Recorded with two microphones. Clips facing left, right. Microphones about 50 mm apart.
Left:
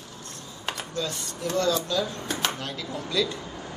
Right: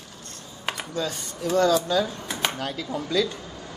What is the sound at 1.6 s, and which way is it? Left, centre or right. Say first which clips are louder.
Speech: right 5 dB; centre.